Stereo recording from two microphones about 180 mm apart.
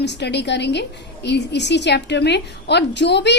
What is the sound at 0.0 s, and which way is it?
A woman's voice, 70° left (ahead or behind).